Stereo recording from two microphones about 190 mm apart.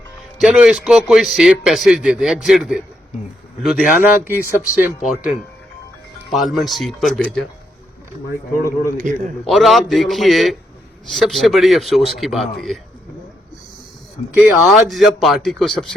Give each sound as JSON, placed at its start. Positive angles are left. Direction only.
{"t": 0.3, "sound": "a man's voice", "side_deg": -5}
{"t": 8.5, "sound": "a man's voice", "side_deg": 50}
{"t": 9.0, "sound": "a man's voice", "side_deg": -40}
{"t": 9.4, "sound": "a man's voice", "side_deg": 0}
{"t": 14.3, "sound": "a man's voice", "side_deg": -5}